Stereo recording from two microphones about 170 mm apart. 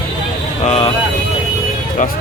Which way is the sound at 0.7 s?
40° left (ahead or behind).